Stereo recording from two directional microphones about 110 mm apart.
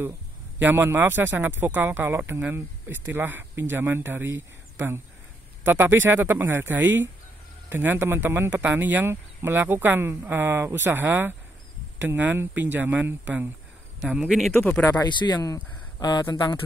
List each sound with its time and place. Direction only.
0.6 s speech: 15° right (ahead or behind)
5.7 s speech: 20° right (ahead or behind)
14.0 s speech: 5° right (ahead or behind)
14.5 s speech: 20° left (ahead or behind)
15.0 s speech: 40° left (ahead or behind)